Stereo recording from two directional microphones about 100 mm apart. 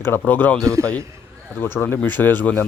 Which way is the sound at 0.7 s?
30° right (ahead or behind).